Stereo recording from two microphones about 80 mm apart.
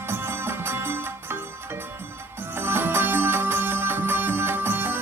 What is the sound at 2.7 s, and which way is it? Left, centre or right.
Music, right.